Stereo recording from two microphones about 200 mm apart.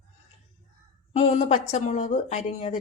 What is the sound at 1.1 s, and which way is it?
A woman's voice, 30° left (ahead or behind).